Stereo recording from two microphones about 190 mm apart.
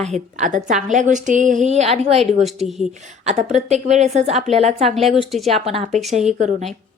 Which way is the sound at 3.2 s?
35° right (ahead or behind).